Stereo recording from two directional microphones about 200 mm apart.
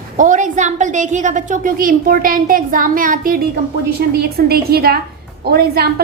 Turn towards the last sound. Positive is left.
turn(degrees=-50)  # may be behind; listen again after turning